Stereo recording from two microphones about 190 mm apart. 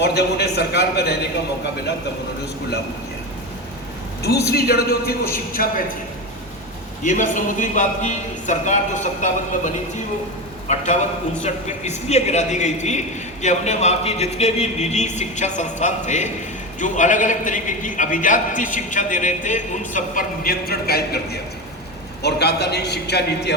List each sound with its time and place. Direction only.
0.0 s a man's voice: 60° left (ahead or behind)
4.4 s a man's voice: 55° left (ahead or behind)
7.0 s a man's voice: 40° left (ahead or behind)
22.2 s a man's voice: 60° left (ahead or behind)